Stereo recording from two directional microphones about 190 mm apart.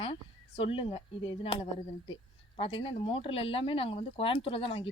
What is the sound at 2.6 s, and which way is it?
Speech, 30° left (ahead or behind).